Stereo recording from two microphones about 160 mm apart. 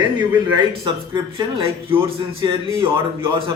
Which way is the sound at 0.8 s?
30° right (ahead or behind).